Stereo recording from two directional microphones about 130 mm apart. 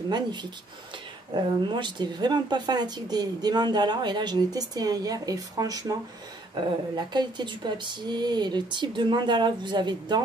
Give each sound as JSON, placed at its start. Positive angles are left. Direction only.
{"t": 0.1, "sound": "speech", "side_deg": -35}